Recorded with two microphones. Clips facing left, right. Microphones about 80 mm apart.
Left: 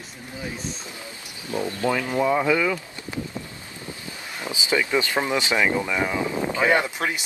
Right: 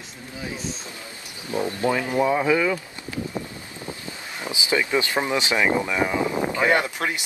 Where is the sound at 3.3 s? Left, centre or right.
Right.